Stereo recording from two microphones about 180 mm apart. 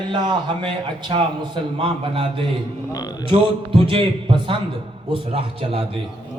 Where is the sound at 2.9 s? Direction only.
20° left (ahead or behind).